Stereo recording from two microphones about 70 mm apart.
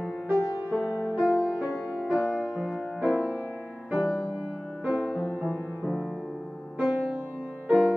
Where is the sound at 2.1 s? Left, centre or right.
Centre.